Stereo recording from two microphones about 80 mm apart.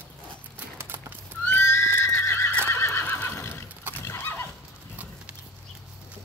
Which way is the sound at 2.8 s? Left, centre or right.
Left.